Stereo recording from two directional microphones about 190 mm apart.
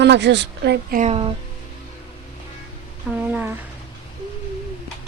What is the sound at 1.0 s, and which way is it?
Speech, 30° right (ahead or behind).